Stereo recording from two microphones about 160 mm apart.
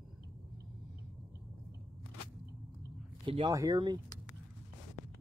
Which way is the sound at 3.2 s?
35° right (ahead or behind).